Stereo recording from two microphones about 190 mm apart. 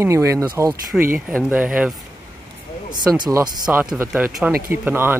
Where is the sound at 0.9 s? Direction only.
Centre (ahead or behind).